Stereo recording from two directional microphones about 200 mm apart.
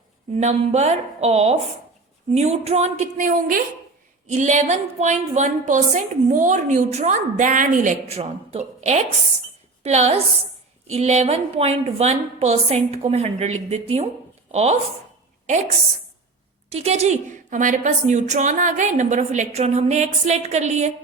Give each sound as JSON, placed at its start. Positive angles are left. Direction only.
{"t": 0.3, "sound": "a woman's voice", "side_deg": -35}